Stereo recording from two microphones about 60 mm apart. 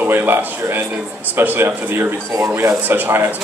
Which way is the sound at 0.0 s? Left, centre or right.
Right.